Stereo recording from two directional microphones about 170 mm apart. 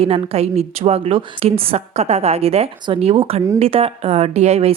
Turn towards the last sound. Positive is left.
turn(degrees=-40)  # may be behind; listen again after turning